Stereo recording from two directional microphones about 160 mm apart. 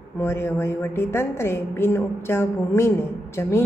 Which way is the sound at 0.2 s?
15° left (ahead or behind).